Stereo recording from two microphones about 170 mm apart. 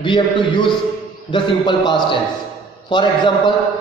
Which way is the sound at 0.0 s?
30° left (ahead or behind).